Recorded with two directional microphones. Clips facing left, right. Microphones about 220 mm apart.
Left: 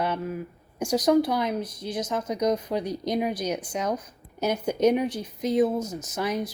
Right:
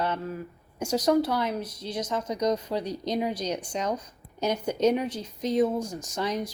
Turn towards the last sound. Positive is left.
turn(degrees=10)  # may be behind; listen again after turning